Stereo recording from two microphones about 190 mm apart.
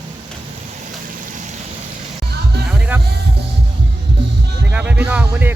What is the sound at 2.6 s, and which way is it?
Music, 5° right (ahead or behind).